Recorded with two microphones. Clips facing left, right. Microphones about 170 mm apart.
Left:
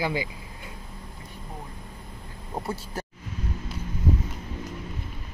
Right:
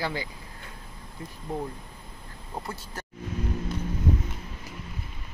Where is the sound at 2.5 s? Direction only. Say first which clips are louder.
Left 5 dB; 25° left (ahead or behind).